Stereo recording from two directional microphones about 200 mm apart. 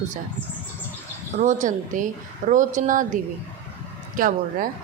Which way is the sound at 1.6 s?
40° right (ahead or behind).